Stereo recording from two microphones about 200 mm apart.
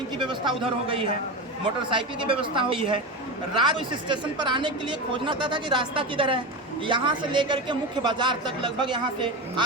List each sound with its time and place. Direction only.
0.2 s a man's voice: 25° right (ahead or behind)